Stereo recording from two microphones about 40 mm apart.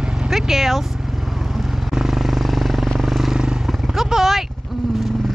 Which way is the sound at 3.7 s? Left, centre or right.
Centre.